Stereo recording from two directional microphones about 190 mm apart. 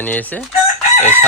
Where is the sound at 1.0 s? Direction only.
10° right (ahead or behind).